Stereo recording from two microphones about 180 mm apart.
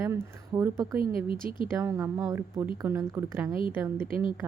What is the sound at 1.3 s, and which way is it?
Speech, 30° left (ahead or behind).